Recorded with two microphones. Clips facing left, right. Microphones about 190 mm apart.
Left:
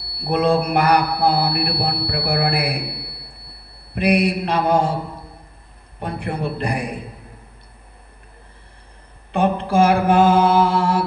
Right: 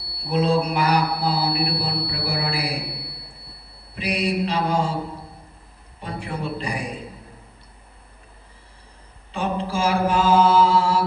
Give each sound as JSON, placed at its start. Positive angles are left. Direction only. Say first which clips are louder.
{"t": 0.2, "sound": "mantra", "louder": "left 3 dB", "side_deg": 60}
{"t": 5.9, "sound": "a man's voice", "louder": "left 5 dB", "side_deg": 60}
{"t": 9.3, "sound": "mantra", "louder": "left 7 dB", "side_deg": 60}